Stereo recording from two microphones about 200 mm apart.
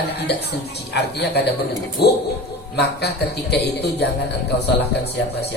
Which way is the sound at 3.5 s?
55° left (ahead or behind).